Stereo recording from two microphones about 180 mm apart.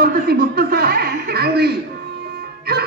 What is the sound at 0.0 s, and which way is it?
Chuckle, 60° right (ahead or behind).